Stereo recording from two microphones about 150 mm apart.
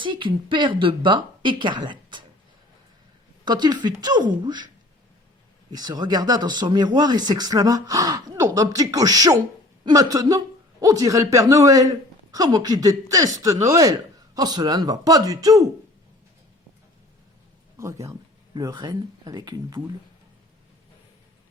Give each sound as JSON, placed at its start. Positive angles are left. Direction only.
{"t": 0.0, "sound": "speech", "side_deg": -35}
{"t": 3.4, "sound": "speech", "side_deg": -30}
{"t": 5.7, "sound": "speech", "side_deg": -25}
{"t": 17.7, "sound": "speech", "side_deg": -20}
{"t": 18.5, "sound": "speech", "side_deg": -30}